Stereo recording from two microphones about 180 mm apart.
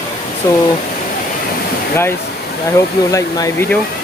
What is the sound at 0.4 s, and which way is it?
Speech, 15° left (ahead or behind).